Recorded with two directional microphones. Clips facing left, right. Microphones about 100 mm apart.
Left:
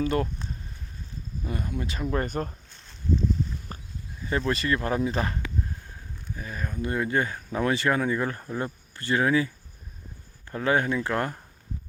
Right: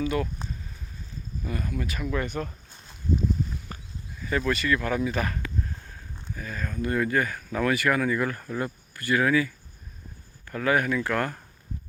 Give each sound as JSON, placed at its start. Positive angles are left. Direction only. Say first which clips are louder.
{"t": 0.0, "sound": "speech", "louder": "left 1 dB", "side_deg": 40}
{"t": 1.5, "sound": "speech", "louder": "even", "side_deg": 25}
{"t": 2.6, "sound": "a sound", "louder": "even", "side_deg": -15}
{"t": 4.2, "sound": "speech", "louder": "even", "side_deg": 30}